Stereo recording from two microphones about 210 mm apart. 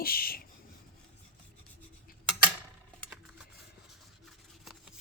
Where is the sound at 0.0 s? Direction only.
45° left (ahead or behind).